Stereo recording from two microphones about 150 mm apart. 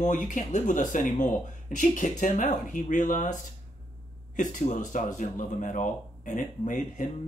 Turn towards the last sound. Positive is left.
turn(degrees=60)  # may be behind; listen again after turning